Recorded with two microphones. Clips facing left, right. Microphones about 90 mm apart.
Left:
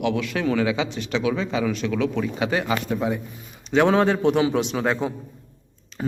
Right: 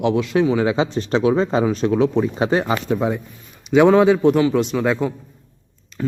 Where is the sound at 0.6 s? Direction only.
35° right (ahead or behind).